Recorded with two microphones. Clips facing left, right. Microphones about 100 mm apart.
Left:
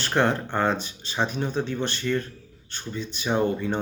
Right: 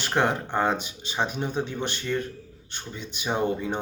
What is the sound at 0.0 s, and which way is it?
Speech, 10° right (ahead or behind).